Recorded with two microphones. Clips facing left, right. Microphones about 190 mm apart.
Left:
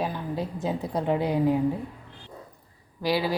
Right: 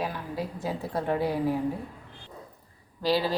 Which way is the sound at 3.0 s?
10° left (ahead or behind).